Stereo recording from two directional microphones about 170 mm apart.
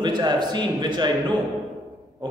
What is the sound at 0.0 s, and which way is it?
A man's voice, 25° right (ahead or behind).